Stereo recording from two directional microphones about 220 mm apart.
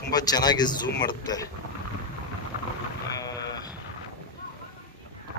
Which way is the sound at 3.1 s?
15° left (ahead or behind).